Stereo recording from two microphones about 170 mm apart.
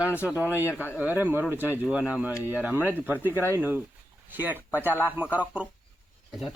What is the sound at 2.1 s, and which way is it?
Speech, 10° right (ahead or behind).